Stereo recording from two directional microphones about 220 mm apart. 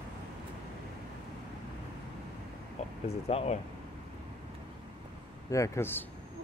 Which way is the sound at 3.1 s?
30° left (ahead or behind).